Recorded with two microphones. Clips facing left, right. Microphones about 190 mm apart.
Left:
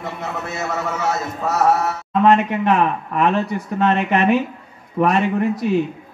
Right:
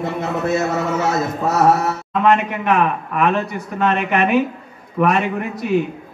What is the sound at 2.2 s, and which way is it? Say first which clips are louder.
A man's voice: left 1 dB; 30° left (ahead or behind).